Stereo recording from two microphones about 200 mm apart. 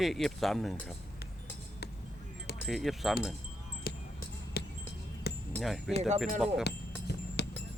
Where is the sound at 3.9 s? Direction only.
50° left (ahead or behind).